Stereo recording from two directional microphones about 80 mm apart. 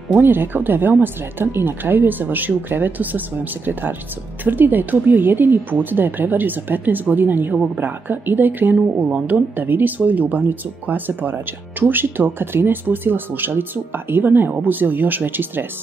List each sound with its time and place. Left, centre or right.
0.1 s speech: right